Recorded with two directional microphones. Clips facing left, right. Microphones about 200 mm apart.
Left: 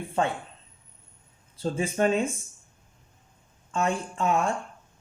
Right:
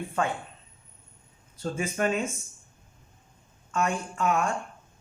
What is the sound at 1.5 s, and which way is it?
Speech, 30° left (ahead or behind).